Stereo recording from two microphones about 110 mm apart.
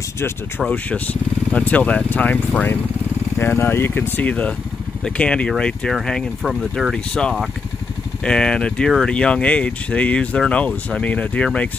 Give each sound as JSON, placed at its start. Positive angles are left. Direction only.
{"t": 0.7, "sound": "speech", "side_deg": 15}
{"t": 3.3, "sound": "speech", "side_deg": 20}